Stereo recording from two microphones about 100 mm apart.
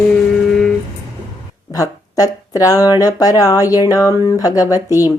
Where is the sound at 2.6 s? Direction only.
35° left (ahead or behind).